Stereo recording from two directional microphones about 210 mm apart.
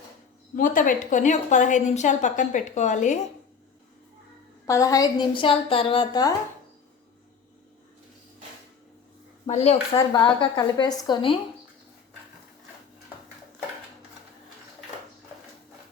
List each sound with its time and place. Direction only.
0.5 s a woman's voice: 40° left (ahead or behind)
4.6 s speech: 15° left (ahead or behind)
9.5 s speech: 30° left (ahead or behind)